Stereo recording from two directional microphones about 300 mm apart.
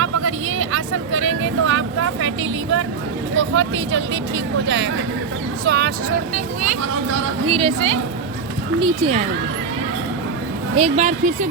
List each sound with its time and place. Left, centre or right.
0.0 s speech: right
3.3 s speech: right
7.4 s a woman's voice: centre
10.8 s speech: right